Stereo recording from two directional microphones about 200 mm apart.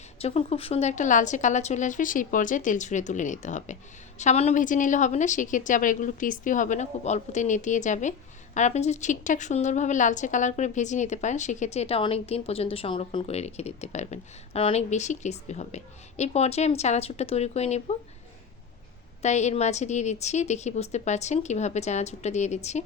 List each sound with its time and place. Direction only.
0.2 s a woman's voice: 30° left (ahead or behind)
19.2 s a woman's voice: 35° left (ahead or behind)